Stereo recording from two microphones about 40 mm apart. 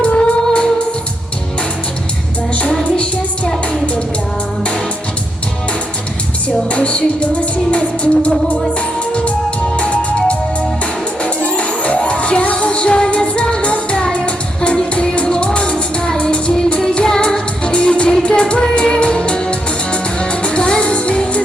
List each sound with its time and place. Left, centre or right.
0.0 s music: left
6.7 s music: left
9.7 s music: left